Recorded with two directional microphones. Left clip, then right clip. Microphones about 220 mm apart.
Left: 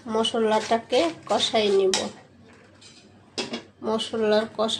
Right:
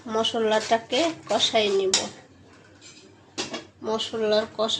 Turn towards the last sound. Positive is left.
turn(degrees=15)  # may be behind; listen again after turning